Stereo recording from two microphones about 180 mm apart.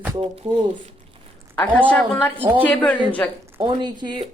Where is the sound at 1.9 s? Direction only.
5° left (ahead or behind).